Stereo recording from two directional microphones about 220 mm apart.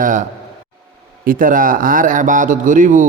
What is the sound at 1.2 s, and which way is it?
Speech, 40° right (ahead or behind).